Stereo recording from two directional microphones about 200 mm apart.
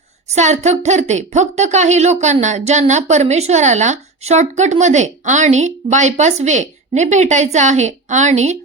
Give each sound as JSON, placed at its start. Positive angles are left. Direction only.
{"t": 0.3, "sound": "a woman's voice", "side_deg": -35}